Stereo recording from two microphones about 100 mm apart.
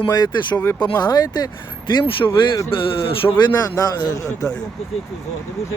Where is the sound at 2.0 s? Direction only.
60° left (ahead or behind).